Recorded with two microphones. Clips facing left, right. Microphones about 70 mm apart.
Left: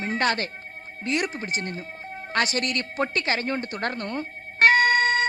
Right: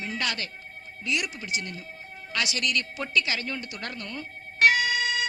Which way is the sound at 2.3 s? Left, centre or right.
Left.